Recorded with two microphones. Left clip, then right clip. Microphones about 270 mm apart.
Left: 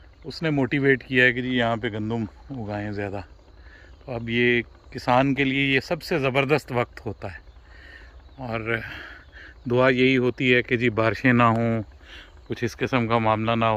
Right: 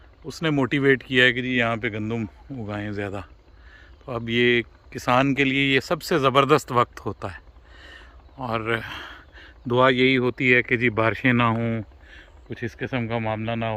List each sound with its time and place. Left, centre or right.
0.3 s speech: centre